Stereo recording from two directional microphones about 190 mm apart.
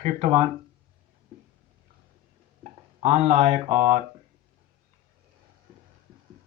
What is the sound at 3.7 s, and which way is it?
Speech, 45° right (ahead or behind).